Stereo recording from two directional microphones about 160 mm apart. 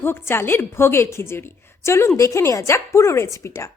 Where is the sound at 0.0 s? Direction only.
15° left (ahead or behind).